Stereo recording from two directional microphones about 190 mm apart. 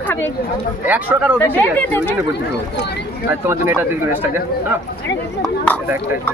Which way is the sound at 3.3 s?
10° right (ahead or behind).